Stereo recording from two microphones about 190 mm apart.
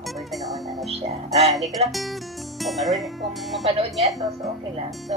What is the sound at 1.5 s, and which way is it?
Speech, centre (ahead or behind).